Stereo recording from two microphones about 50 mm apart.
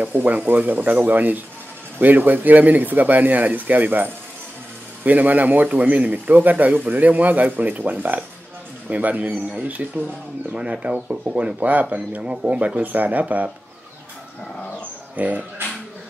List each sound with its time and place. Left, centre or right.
0.0 s speech: right
10.5 s speech: right
15.1 s speech: right